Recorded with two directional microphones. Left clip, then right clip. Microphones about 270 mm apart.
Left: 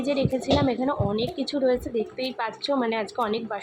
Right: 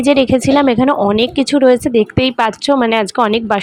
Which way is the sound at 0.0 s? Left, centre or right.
Right.